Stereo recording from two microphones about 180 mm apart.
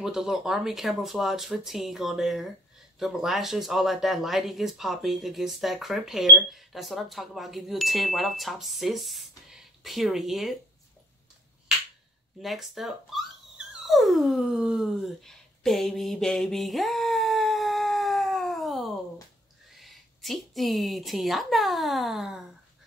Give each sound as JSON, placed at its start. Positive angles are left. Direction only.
{"t": 0.0, "sound": "speech", "side_deg": -5}
{"t": 12.4, "sound": "a sound", "side_deg": 0}
{"t": 19.7, "sound": "a woman's voice", "side_deg": 0}